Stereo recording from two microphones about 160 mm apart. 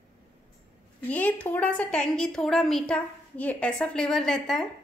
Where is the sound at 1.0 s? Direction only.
10° left (ahead or behind).